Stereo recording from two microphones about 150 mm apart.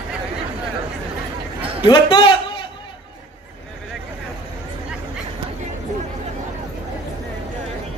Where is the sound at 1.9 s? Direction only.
30° left (ahead or behind).